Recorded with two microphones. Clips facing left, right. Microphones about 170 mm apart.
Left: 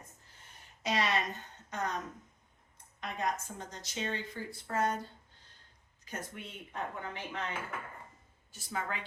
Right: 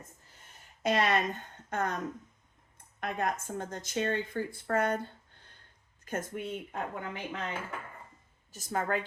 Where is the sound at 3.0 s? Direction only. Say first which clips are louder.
Right 3 dB; 55° right (ahead or behind).